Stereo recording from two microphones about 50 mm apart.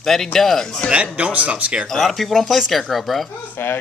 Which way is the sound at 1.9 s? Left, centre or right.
Centre.